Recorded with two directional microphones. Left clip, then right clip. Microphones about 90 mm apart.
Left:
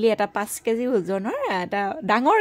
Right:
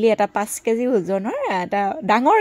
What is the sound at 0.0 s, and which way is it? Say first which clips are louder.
A woman's voice: right 4 dB; 30° right (ahead or behind).